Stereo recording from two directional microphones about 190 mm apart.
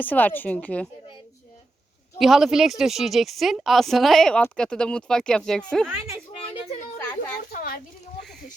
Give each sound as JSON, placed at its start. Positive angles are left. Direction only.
{"t": 0.0, "sound": "a woman's voice", "side_deg": 10}
{"t": 2.1, "sound": "speech", "side_deg": 0}
{"t": 7.5, "sound": "a sound", "side_deg": 50}